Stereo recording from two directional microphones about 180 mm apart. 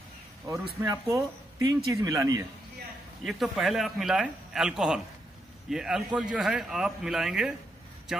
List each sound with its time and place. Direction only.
0.8 s speech: 20° right (ahead or behind)
3.3 s a man's voice: centre (ahead or behind)